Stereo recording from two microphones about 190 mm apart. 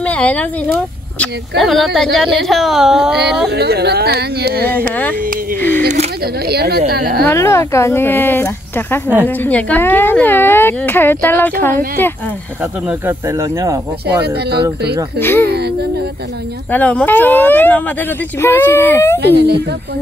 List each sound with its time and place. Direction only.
0.0 s speech: 5° left (ahead or behind)
3.4 s speech: 60° right (ahead or behind)
6.5 s a woman's voice: 55° right (ahead or behind)
7.2 s a woman's voice: 15° left (ahead or behind)
13.0 s speech: 15° right (ahead or behind)
15.1 s a woman's voice: 10° left (ahead or behind)
16.7 s a woman's voice: 10° left (ahead or behind)
19.1 s speech: 60° right (ahead or behind)